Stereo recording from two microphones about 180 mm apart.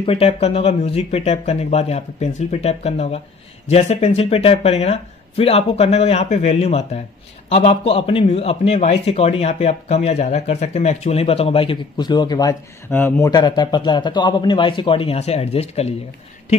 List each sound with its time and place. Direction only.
0.0 s a man's voice: 30° left (ahead or behind)
12.9 s speech: 10° left (ahead or behind)
13.3 s a man's voice: 20° left (ahead or behind)